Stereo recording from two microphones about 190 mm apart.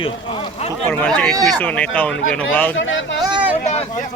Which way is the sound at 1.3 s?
20° right (ahead or behind).